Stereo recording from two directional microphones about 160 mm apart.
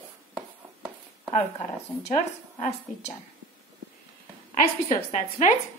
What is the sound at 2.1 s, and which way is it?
A woman's voice, 45° left (ahead or behind).